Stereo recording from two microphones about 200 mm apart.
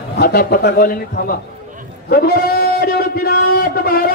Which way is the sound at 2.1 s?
50° left (ahead or behind).